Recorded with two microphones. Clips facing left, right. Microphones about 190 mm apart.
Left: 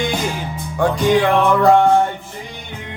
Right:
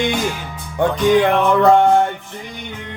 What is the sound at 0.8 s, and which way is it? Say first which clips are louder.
Music: right 1 dB; 25° right (ahead or behind).